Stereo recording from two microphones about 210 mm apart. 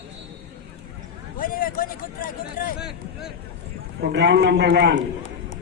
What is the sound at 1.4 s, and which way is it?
Speech, 40° left (ahead or behind).